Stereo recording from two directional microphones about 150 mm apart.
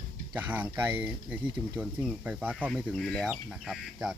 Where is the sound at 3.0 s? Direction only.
5° left (ahead or behind).